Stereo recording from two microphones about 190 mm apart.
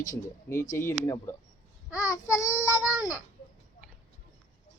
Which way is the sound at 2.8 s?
5° right (ahead or behind).